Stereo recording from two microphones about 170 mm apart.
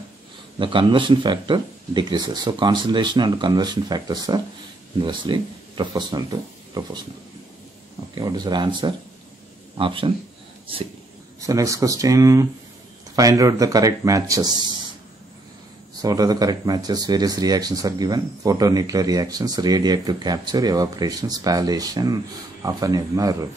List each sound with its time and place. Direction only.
0.6 s speech: 30° right (ahead or behind)
8.1 s speech: 25° right (ahead or behind)
11.4 s speech: 20° right (ahead or behind)
16.0 s speech: 20° right (ahead or behind)